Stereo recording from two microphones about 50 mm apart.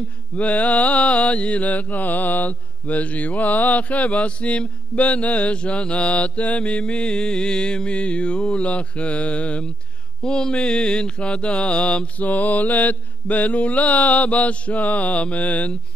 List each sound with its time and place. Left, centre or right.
0.4 s mantra: left